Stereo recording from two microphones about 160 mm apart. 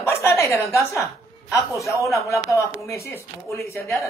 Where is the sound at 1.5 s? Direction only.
20° left (ahead or behind).